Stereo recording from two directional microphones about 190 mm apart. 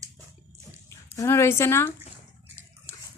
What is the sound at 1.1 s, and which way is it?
Speech, 15° left (ahead or behind).